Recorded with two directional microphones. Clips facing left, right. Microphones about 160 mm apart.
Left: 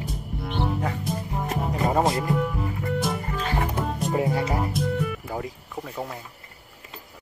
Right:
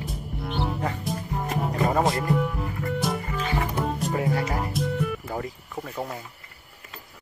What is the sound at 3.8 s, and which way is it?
Music, centre (ahead or behind).